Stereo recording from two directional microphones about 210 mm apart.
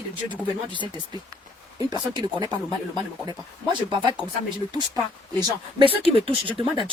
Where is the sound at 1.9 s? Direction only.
20° right (ahead or behind).